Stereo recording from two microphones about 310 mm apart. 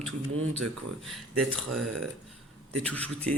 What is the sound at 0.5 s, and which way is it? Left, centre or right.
Speech, centre.